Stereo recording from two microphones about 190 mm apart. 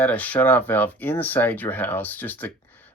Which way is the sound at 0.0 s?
10° left (ahead or behind).